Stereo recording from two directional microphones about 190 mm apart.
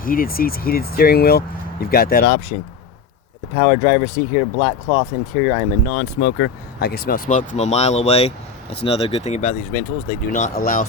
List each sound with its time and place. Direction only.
0.0 s speech: 50° left (ahead or behind)
3.5 s speech: 40° left (ahead or behind)
5.9 s speech: 60° left (ahead or behind); by 10.8 s 45° left (ahead or behind)